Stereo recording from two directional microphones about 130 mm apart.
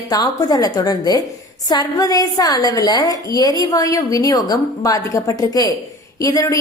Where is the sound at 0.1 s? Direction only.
30° left (ahead or behind).